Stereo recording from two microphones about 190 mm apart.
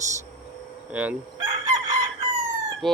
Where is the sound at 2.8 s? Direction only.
Centre (ahead or behind).